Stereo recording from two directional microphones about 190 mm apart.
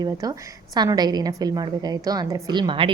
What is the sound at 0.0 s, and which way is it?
A woman's voice, 20° right (ahead or behind).